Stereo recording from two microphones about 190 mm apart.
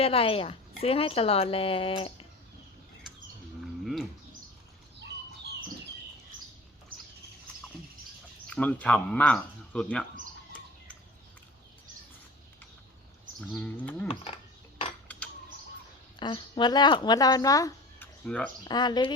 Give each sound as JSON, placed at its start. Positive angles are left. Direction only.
{"t": 0.0, "sound": "speech", "side_deg": 30}
{"t": 8.4, "sound": "speech", "side_deg": 5}
{"t": 13.5, "sound": "speech", "side_deg": 5}
{"t": 16.1, "sound": "speech", "side_deg": 25}
{"t": 18.3, "sound": "speech", "side_deg": 5}
{"t": 18.6, "sound": "speech", "side_deg": 20}